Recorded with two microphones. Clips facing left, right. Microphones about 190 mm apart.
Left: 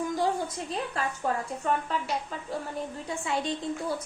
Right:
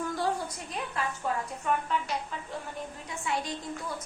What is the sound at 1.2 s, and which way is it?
Speech, 45° left (ahead or behind).